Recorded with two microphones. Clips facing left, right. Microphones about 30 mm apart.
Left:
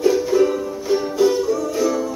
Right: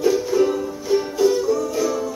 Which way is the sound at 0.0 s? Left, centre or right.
Centre.